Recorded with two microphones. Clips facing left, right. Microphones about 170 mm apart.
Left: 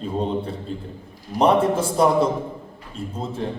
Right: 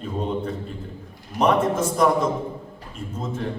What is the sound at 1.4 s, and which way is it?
Speech, 30° left (ahead or behind).